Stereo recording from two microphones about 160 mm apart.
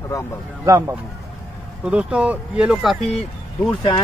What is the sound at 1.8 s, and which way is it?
Speech, 5° right (ahead or behind).